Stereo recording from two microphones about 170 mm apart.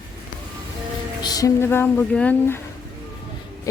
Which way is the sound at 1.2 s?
20° left (ahead or behind).